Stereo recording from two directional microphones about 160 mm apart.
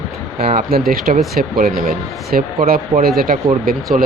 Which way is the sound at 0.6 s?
70° right (ahead or behind).